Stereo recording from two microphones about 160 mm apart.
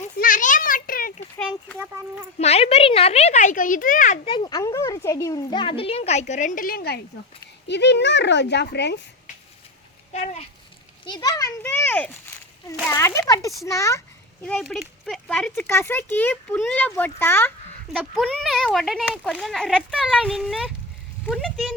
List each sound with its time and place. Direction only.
0.2 s a sound: 55° left (ahead or behind)
2.4 s speech: 40° left (ahead or behind)
4.3 s a child's voice: 25° left (ahead or behind); by 7.0 s 80° left
7.7 s speech: 90° left
10.1 s a child's voice: 45° left (ahead or behind)
11.0 s speech: 25° left (ahead or behind)
11.6 s speech: 10° left (ahead or behind)
14.4 s speech: 5° left (ahead or behind)
17.8 s a child's voice: centre (ahead or behind)